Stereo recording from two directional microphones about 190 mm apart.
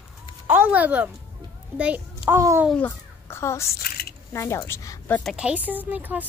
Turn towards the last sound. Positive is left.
turn(degrees=-10)  # may be behind; listen again after turning